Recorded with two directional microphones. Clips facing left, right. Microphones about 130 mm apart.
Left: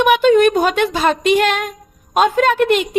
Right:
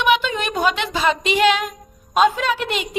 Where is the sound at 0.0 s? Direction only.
50° left (ahead or behind).